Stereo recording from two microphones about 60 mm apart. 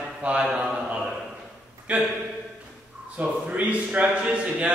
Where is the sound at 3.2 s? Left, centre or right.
Centre.